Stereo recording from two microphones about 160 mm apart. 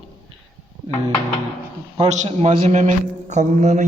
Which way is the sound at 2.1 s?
45° right (ahead or behind).